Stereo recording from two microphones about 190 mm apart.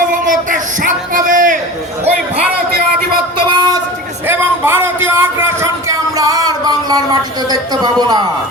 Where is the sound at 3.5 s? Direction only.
25° right (ahead or behind).